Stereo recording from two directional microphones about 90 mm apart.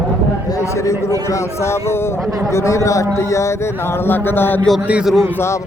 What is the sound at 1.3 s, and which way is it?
A man's voice, 30° left (ahead or behind).